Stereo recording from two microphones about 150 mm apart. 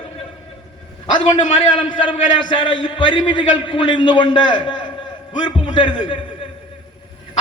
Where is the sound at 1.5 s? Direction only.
35° left (ahead or behind).